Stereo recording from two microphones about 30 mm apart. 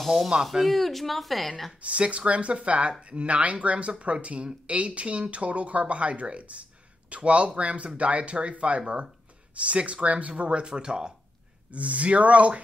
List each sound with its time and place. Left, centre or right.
0.0 s speech: centre
1.8 s speech: right
10.7 s speech: right
11.7 s speech: right